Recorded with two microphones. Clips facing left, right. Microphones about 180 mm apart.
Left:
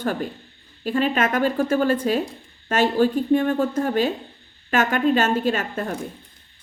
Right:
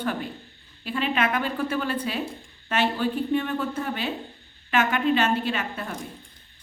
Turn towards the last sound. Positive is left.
turn(degrees=45)  # may be behind; listen again after turning